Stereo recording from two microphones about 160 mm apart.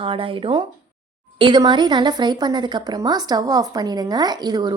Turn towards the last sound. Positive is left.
turn(degrees=-25)  # may be behind; listen again after turning